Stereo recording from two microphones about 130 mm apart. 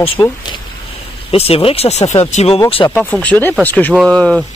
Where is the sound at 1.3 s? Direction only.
45° left (ahead or behind).